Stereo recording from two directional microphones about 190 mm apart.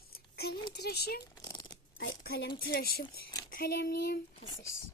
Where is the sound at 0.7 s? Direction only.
60° left (ahead or behind).